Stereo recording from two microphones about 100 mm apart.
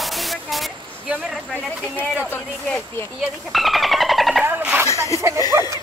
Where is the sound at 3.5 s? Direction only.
Centre (ahead or behind).